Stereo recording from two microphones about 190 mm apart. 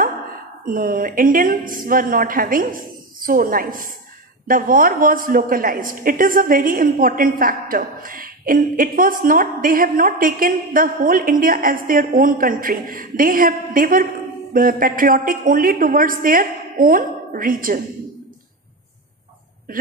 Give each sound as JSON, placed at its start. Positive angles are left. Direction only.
{"t": 0.7, "sound": "a woman's voice", "side_deg": -50}